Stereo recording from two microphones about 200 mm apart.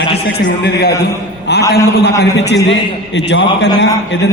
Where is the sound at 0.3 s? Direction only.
50° left (ahead or behind).